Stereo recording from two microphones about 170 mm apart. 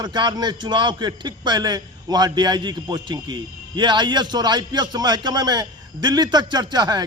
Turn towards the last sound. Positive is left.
turn(degrees=-25)  # may be behind; listen again after turning